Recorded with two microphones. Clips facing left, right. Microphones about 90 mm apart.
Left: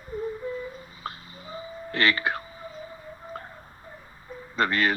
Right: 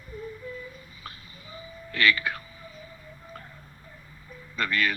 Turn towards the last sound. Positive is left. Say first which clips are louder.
# left 4 dB
turn(degrees=30)  # may be behind; listen again after turning